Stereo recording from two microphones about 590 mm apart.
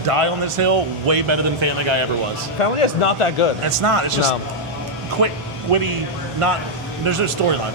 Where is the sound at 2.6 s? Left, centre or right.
Left.